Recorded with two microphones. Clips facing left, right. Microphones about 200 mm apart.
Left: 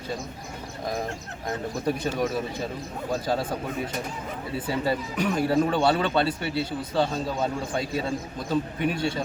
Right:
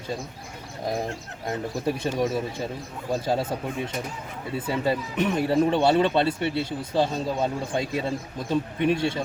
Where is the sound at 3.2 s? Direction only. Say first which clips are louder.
Right 2 dB; 25° right (ahead or behind).